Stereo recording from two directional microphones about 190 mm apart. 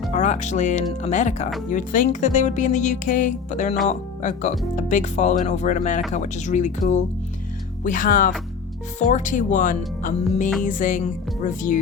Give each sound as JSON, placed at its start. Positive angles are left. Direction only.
{"t": 0.1, "sound": "speech", "side_deg": 40}